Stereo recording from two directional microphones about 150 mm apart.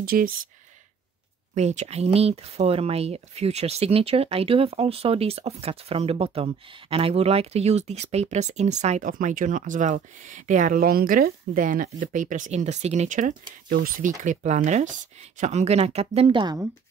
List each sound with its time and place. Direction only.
0.0 s speech: 75° right (ahead or behind)
1.5 s speech: 50° right (ahead or behind); by 16.5 s 35° right (ahead or behind)